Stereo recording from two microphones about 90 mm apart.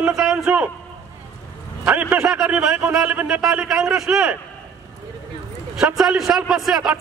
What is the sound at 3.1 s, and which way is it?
Speech, 20° right (ahead or behind).